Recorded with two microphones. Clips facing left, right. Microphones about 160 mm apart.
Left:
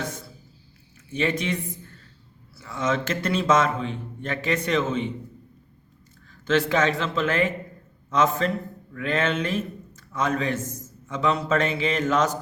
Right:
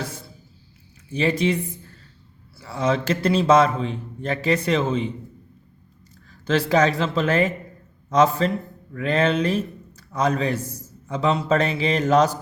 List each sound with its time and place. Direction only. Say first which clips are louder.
1.1 s a man's voice: right 4 dB; 35° right (ahead or behind)
2.6 s a man's voice: right 3 dB; 35° right (ahead or behind)
6.4 s a man's voice: right 3 dB; 35° right (ahead or behind)